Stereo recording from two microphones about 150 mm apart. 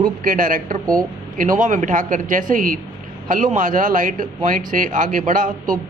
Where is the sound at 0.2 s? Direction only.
65° right (ahead or behind).